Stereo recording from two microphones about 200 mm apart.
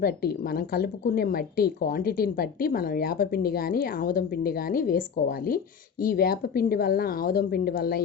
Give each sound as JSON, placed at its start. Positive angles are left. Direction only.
{"t": 0.0, "sound": "a woman's voice", "side_deg": 50}